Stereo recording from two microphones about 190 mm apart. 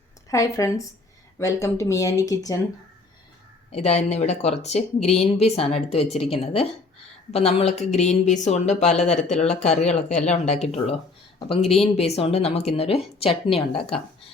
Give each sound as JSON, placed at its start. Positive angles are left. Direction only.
{"t": 0.3, "sound": "speech", "side_deg": 15}
{"t": 3.7, "sound": "speech", "side_deg": 35}